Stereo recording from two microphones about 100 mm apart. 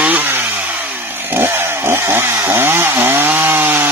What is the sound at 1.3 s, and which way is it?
Chainsaw, 25° right (ahead or behind).